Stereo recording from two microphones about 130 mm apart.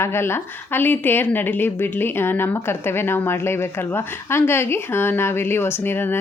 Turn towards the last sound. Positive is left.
turn(degrees=15)  # may be behind; listen again after turning